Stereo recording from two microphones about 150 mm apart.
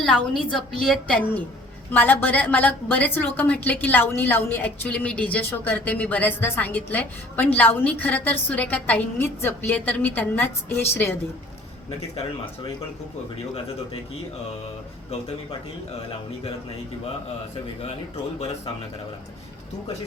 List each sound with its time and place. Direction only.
0.0 s a woman's voice: 5° left (ahead or behind)
18.3 s speech: 45° left (ahead or behind)